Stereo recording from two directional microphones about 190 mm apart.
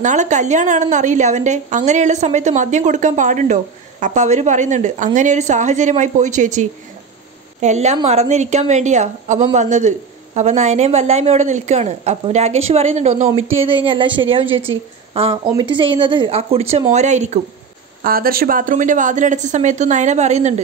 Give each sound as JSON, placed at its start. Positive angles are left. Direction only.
{"t": 0.0, "sound": "a woman's voice", "side_deg": -40}
{"t": 18.0, "sound": "a woman's voice", "side_deg": -50}